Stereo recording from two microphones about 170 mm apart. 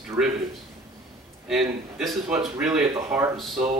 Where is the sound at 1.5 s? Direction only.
Centre (ahead or behind).